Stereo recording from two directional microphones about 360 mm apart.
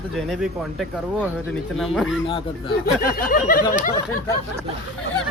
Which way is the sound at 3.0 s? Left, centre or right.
Left.